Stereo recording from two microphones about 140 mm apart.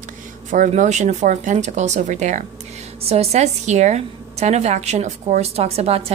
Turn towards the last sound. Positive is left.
turn(degrees=-50)  # may be behind; listen again after turning